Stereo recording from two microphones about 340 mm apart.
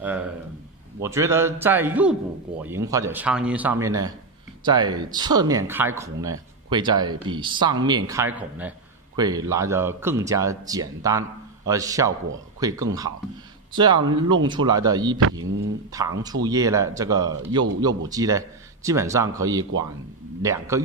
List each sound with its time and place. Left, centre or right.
0.0 s a sound: centre
1.0 s speech: centre
15.4 s speech: right
15.9 s speech: centre